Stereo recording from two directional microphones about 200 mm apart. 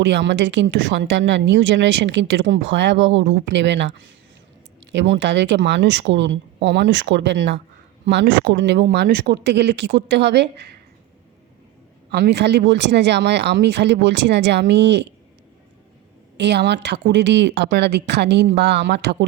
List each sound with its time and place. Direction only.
0.0 s a woman's voice: 60° right (ahead or behind)
12.1 s a woman's voice: 55° right (ahead or behind)
16.4 s a woman's voice: 60° right (ahead or behind)